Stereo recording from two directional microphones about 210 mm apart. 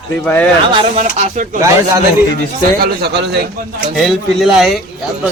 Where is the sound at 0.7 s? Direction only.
30° right (ahead or behind).